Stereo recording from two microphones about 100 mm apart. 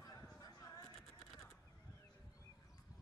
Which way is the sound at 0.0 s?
40° left (ahead or behind).